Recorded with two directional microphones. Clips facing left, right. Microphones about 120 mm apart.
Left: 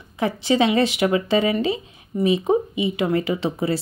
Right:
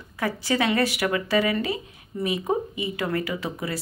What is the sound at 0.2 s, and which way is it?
Speech, 20° left (ahead or behind).